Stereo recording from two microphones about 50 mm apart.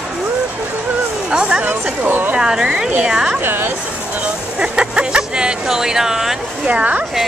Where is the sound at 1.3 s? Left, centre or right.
Centre.